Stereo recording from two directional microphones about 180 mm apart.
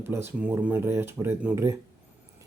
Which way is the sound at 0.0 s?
10° right (ahead or behind).